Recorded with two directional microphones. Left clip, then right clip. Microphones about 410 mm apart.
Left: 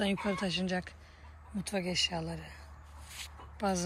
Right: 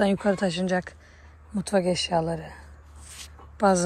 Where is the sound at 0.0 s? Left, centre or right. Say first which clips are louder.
Right 10 dB; centre.